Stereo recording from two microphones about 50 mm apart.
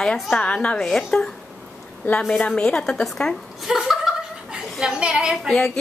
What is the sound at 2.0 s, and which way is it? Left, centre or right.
Speech, left.